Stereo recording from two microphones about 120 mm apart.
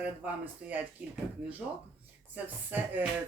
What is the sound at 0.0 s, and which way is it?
Speech, 15° right (ahead or behind).